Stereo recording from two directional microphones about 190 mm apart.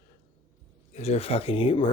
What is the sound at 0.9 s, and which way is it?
Speech, 35° left (ahead or behind).